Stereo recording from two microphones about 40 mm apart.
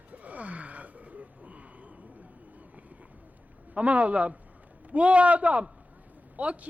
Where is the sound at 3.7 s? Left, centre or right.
Right.